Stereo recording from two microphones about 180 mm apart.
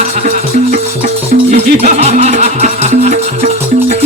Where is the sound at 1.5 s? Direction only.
35° right (ahead or behind).